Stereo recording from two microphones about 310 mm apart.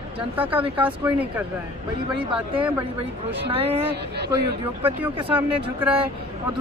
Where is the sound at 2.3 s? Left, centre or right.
Centre.